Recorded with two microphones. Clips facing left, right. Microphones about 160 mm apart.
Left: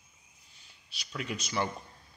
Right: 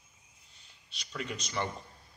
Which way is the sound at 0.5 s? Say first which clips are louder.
Left 1 dB; 5° left (ahead or behind).